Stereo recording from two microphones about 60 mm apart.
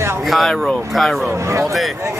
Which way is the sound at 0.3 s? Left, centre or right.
Centre.